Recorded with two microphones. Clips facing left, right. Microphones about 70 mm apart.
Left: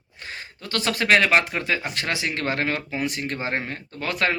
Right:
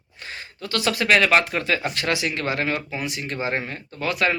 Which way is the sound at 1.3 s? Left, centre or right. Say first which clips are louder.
Right 1 dB; left.